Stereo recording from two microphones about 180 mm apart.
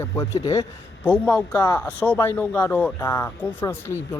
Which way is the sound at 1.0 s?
10° left (ahead or behind).